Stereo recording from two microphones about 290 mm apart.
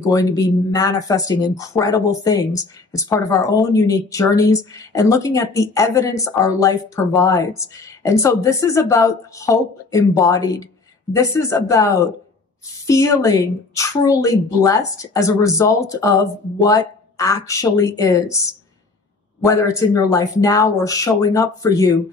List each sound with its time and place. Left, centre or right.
0.1 s speech: centre